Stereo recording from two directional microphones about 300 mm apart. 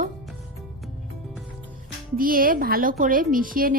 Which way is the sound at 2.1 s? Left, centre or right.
Right.